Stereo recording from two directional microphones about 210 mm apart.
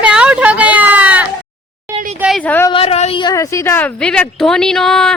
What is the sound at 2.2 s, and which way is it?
Speech, 5° left (ahead or behind).